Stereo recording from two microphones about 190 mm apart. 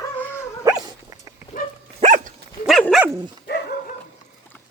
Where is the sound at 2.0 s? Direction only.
40° right (ahead or behind).